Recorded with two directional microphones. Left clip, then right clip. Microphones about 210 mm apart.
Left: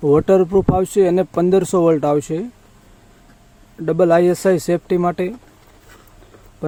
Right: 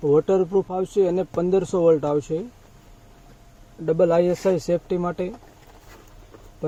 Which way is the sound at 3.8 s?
50° left (ahead or behind).